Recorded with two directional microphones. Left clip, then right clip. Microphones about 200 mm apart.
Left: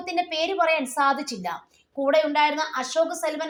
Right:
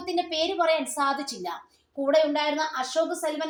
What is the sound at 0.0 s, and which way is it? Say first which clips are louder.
A woman's voice: left 1 dB; 25° left (ahead or behind).